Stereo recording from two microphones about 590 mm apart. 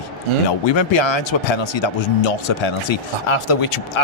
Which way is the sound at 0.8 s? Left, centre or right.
Left.